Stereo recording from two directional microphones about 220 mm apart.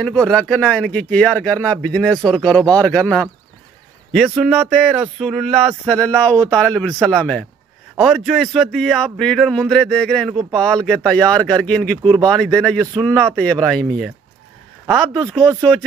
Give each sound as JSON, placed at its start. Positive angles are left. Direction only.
{"t": 0.0, "sound": "speech", "side_deg": 5}
{"t": 12.0, "sound": "speech", "side_deg": -25}
{"t": 12.3, "sound": "speech", "side_deg": 5}